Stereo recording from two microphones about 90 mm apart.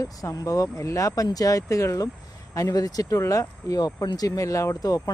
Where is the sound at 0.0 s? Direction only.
40° left (ahead or behind).